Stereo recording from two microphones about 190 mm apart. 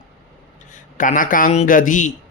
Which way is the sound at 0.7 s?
45° left (ahead or behind).